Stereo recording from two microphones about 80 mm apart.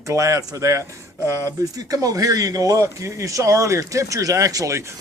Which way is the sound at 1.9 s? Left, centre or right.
Right.